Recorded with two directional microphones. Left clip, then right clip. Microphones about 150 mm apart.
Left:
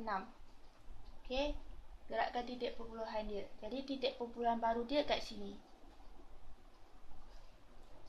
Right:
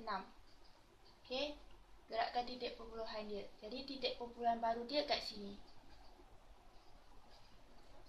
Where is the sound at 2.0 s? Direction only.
55° left (ahead or behind).